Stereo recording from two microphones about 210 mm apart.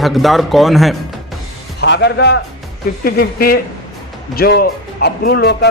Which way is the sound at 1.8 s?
55° left (ahead or behind).